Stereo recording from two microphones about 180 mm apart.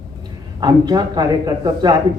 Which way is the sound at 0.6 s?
20° right (ahead or behind).